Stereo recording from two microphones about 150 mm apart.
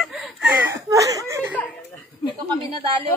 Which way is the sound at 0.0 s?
Centre (ahead or behind).